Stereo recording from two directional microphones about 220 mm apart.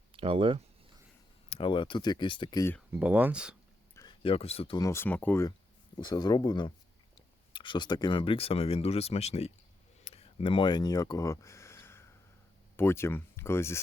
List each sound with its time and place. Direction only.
0.1 s speech: 25° right (ahead or behind)
1.5 s speech: 25° left (ahead or behind)
2.9 s speech: 5° right (ahead or behind)
3.9 s speech: 20° left (ahead or behind)
10.0 s a sound: 25° left (ahead or behind); by 12.0 s 10° left (ahead or behind)
12.7 s speech: 10° left (ahead or behind)